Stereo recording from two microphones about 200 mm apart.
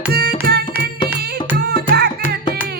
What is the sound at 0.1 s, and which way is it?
Tabla, 50° right (ahead or behind).